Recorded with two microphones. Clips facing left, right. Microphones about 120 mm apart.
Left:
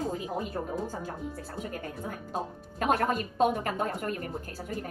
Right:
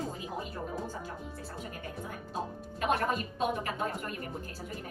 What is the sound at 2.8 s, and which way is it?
A woman's voice, 45° left (ahead or behind).